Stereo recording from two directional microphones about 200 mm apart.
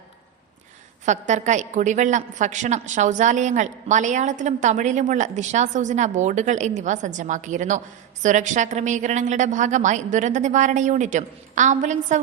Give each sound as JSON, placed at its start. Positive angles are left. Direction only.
{"t": 1.0, "sound": "a woman's voice", "side_deg": -35}